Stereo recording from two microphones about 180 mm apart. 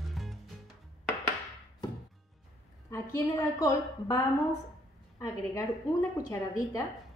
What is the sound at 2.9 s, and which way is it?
A woman's voice, 20° left (ahead or behind).